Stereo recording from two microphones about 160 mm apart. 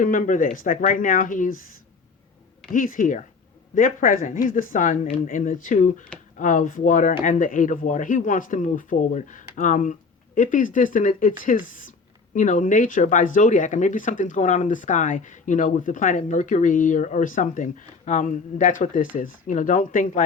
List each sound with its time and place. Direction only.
0.0 s speech: 55° left (ahead or behind)
2.7 s speech: 60° left (ahead or behind)